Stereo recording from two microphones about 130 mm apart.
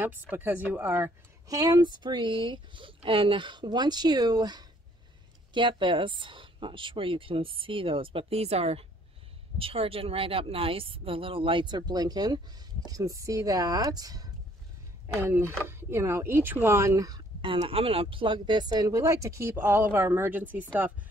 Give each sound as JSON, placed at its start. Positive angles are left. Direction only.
{"t": 0.0, "sound": "speech", "side_deg": -15}
{"t": 1.5, "sound": "speech", "side_deg": -30}
{"t": 15.1, "sound": "speech", "side_deg": -20}
{"t": 17.4, "sound": "speech", "side_deg": -45}